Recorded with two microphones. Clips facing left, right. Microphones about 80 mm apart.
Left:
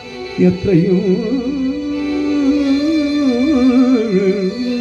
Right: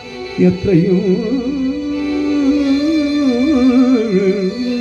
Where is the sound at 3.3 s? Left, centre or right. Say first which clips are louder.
Even; centre.